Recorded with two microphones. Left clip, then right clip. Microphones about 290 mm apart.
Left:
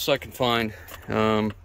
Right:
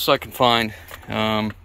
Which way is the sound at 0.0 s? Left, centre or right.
Centre.